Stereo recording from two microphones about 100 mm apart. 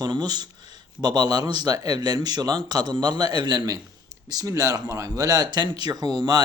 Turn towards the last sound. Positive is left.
turn(degrees=-45)  # may be behind; listen again after turning